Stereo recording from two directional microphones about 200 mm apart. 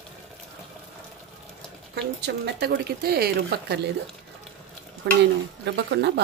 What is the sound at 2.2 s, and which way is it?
Speech, 55° right (ahead or behind).